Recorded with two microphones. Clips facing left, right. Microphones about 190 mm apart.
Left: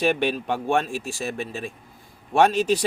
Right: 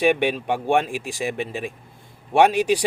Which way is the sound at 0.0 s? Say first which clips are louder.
Right 3 dB; 15° right (ahead or behind).